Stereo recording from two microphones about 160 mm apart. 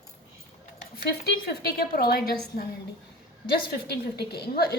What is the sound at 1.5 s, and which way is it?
A woman's voice, 80° left.